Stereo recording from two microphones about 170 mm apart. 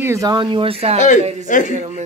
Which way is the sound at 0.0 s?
20° right (ahead or behind).